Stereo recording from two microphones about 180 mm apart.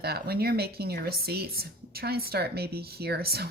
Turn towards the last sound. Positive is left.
turn(degrees=-60)  # may be behind; listen again after turning